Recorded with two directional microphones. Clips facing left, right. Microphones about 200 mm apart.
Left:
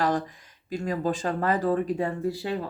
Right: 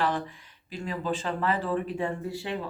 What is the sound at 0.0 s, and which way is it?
Speech, 40° left (ahead or behind).